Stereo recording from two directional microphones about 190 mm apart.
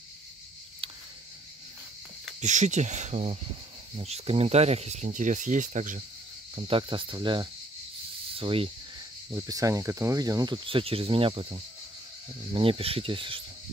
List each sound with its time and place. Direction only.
2.4 s speech: 40° right (ahead or behind)
6.5 s speech: 25° right (ahead or behind)
9.3 s speech: 15° right (ahead or behind)